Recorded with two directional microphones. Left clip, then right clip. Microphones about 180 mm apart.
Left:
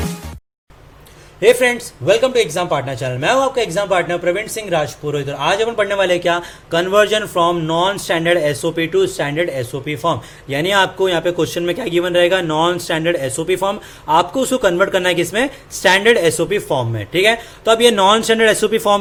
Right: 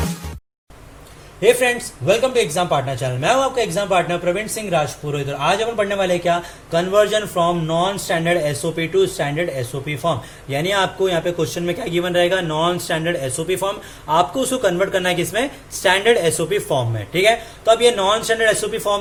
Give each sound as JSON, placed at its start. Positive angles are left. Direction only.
{"t": 1.4, "sound": "a man's voice", "side_deg": 35}